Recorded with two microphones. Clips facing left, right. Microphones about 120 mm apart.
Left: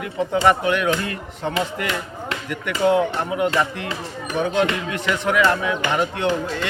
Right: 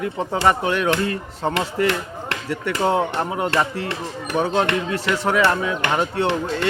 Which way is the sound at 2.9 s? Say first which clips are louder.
Left 3 dB; 35° right (ahead or behind).